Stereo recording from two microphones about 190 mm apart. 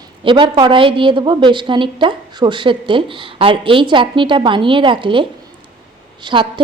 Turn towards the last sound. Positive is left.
turn(degrees=-25)  # may be behind; listen again after turning